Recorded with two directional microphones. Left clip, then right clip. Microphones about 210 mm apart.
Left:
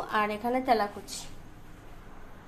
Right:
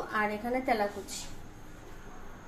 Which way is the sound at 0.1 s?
30° left (ahead or behind).